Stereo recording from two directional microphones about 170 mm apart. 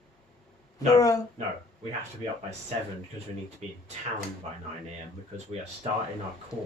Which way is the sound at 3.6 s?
40° right (ahead or behind).